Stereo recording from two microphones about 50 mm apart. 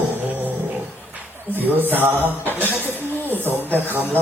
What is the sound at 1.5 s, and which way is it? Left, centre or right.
Speech, right.